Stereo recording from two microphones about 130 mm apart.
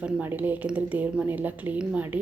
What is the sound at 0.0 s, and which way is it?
A woman's voice, 15° right (ahead or behind).